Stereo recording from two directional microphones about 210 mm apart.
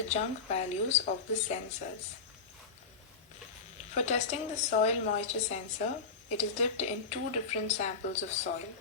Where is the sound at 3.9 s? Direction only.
35° left (ahead or behind).